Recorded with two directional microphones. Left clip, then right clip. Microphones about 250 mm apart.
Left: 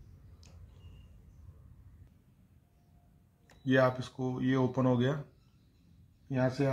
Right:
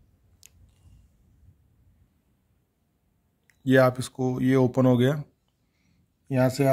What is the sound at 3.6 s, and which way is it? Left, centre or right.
Speech, right.